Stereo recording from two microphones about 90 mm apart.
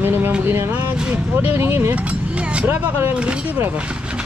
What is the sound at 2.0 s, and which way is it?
Vehicle, 15° right (ahead or behind).